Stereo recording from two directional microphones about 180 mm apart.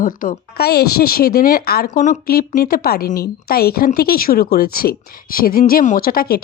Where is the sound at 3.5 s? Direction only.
60° left (ahead or behind).